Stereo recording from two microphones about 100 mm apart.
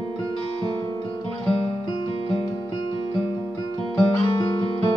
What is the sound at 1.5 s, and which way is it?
Music, 75° left (ahead or behind).